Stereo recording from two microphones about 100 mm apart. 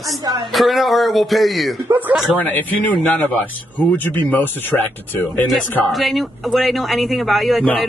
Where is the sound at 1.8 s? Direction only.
20° right (ahead or behind).